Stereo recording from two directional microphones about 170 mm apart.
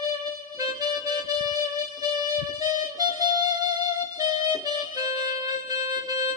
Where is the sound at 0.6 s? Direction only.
25° right (ahead or behind).